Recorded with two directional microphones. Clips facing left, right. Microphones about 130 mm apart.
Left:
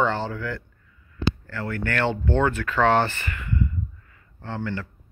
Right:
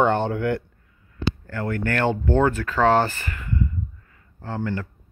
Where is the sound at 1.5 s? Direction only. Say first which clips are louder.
Right 3 dB; 45° right (ahead or behind).